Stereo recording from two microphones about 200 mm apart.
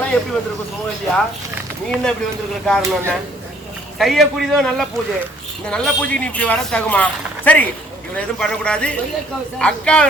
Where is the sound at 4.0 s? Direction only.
Centre (ahead or behind).